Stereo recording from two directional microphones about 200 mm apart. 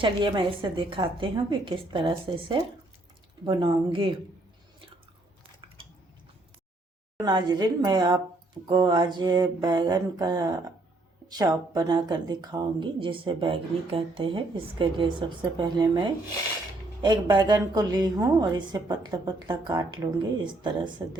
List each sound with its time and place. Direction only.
0.0 s a woman's voice: 25° right (ahead or behind)
7.2 s a woman's voice: 20° right (ahead or behind)